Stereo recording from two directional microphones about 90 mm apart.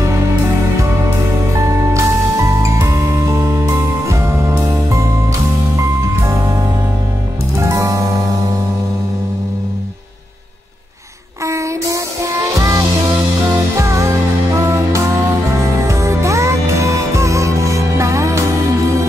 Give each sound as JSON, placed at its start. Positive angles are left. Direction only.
{"t": 1.5, "sound": "music", "side_deg": -35}
{"t": 6.2, "sound": "music", "side_deg": -35}
{"t": 11.4, "sound": "music", "side_deg": -35}